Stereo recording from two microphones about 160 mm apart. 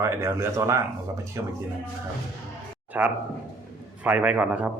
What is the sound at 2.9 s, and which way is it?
Speech, 10° right (ahead or behind).